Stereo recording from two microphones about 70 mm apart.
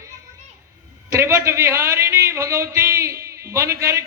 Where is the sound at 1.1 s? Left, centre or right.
Right.